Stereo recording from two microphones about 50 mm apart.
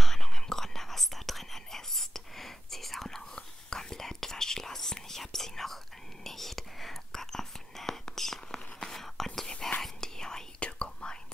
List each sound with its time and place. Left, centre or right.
0.0 s whispering: centre